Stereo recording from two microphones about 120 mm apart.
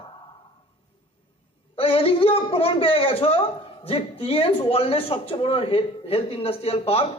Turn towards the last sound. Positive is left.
turn(degrees=55)  # may be behind; listen again after turning